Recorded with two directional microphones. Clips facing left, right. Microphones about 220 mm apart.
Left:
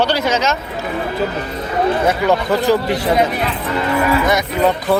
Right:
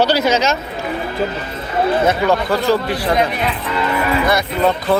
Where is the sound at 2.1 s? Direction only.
15° left (ahead or behind).